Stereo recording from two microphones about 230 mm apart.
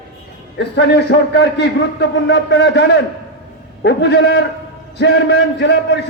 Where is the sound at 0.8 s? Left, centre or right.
Left.